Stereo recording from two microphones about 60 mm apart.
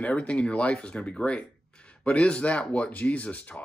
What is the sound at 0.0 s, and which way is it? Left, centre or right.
Speech, centre.